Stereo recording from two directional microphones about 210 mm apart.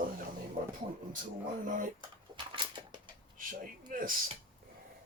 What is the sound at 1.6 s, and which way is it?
Speech, 40° right (ahead or behind).